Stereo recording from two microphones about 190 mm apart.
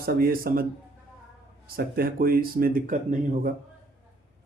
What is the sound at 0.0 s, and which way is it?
Speech, 50° right (ahead or behind).